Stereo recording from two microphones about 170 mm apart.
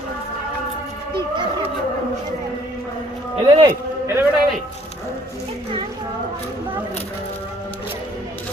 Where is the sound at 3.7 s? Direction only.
15° right (ahead or behind).